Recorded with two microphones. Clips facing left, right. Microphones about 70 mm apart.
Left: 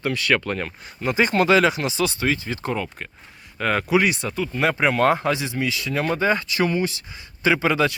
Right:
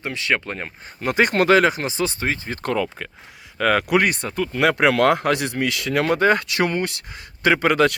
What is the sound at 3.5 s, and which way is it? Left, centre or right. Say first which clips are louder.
Speech: right 2 dB; right.